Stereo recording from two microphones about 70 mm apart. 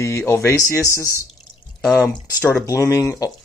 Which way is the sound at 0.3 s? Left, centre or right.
Left.